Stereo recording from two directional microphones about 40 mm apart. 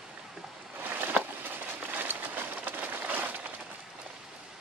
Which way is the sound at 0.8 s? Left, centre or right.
Right.